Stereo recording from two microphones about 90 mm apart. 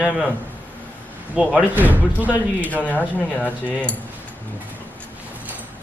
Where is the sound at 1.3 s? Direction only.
15° right (ahead or behind).